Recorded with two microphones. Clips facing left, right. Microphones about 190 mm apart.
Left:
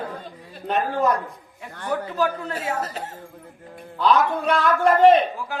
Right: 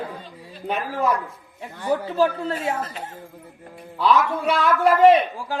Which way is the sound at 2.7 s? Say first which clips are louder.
Left 1 dB; 40° left (ahead or behind).